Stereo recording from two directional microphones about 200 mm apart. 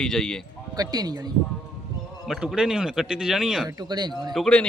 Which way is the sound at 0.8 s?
20° right (ahead or behind).